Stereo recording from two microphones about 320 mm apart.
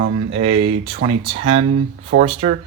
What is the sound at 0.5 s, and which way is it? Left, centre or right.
Speech, right.